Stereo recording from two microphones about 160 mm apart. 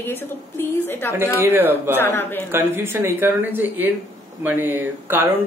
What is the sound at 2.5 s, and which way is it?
Speech, 15° right (ahead or behind).